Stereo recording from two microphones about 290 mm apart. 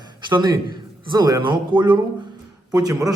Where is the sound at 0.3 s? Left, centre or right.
Centre.